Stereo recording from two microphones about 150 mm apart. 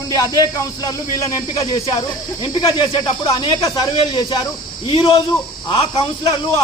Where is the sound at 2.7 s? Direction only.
30° left (ahead or behind).